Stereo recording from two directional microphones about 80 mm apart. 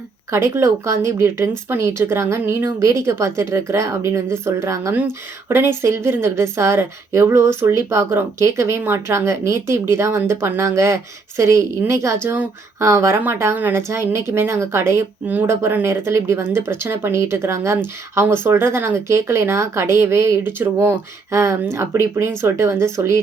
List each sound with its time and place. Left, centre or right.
0.3 s speech: right
4.9 s speech: right